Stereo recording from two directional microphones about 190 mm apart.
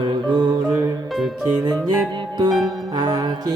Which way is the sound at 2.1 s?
25° right (ahead or behind).